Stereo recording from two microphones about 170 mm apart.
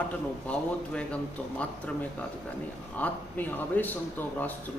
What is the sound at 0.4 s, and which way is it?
A man's voice, 5° left (ahead or behind).